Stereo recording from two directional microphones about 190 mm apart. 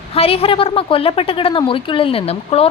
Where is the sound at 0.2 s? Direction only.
30° left (ahead or behind).